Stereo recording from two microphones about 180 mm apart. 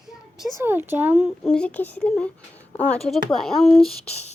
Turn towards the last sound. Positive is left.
turn(degrees=35)  # may be behind; listen again after turning